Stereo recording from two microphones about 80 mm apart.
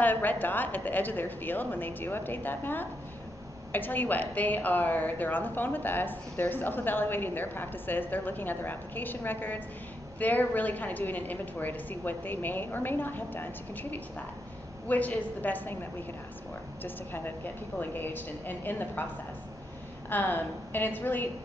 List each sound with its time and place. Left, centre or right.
0.0 s a woman's voice: left
20.1 s a woman's voice: left